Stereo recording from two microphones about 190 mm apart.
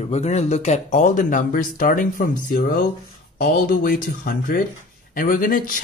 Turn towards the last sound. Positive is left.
turn(degrees=45)  # may be behind; listen again after turning